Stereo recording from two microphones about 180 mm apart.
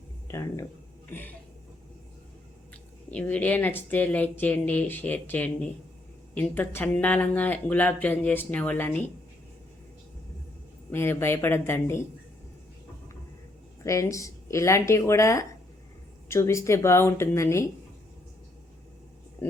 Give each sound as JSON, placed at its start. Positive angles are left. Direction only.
{"t": 0.3, "sound": "speech", "side_deg": 15}
{"t": 3.1, "sound": "speech", "side_deg": 5}
{"t": 10.9, "sound": "speech", "side_deg": 15}
{"t": 13.8, "sound": "speech", "side_deg": 15}